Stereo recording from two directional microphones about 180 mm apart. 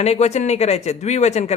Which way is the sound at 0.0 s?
35° left (ahead or behind).